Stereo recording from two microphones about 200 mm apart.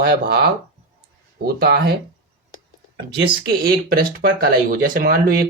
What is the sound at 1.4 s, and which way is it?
Speech, 50° right (ahead or behind).